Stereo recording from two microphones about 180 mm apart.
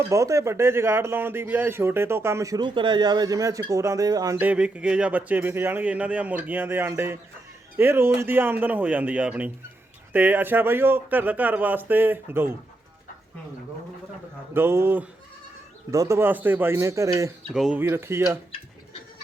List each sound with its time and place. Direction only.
0.1 s speech: 15° right (ahead or behind)
14.5 s speech: 15° right (ahead or behind)
17.5 s speech: centre (ahead or behind)
17.7 s speech: 15° right (ahead or behind)